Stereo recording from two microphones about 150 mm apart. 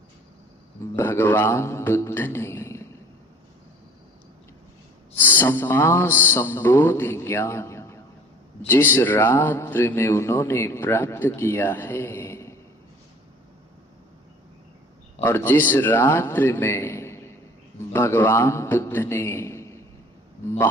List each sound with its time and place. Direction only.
0.9 s speech: 15° left (ahead or behind)
5.1 s a sound: 15° left (ahead or behind)
8.6 s speech: 15° left (ahead or behind)
15.2 s a man's voice: 15° left (ahead or behind)